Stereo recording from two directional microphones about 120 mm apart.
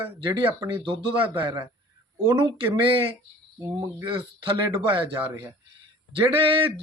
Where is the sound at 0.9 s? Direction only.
45° right (ahead or behind).